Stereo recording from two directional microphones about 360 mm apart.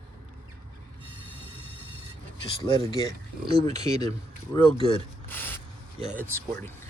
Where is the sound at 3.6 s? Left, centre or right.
Centre.